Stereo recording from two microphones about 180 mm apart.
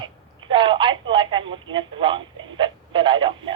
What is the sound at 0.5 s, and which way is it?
Telephone, 25° right (ahead or behind).